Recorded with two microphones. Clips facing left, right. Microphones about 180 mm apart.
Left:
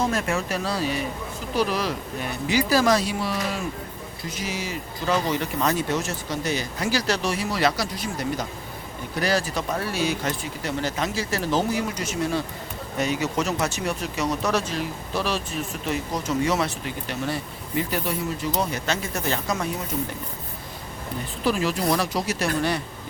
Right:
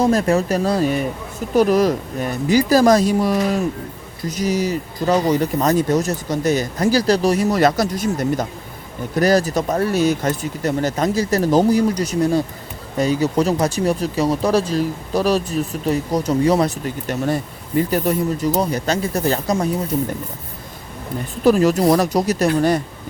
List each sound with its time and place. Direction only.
0.0 s speech: 35° right (ahead or behind)
21.4 s speech: 45° right (ahead or behind)